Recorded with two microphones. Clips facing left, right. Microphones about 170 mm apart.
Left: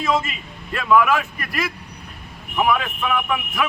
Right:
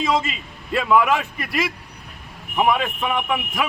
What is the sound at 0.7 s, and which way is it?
Speech, 15° right (ahead or behind).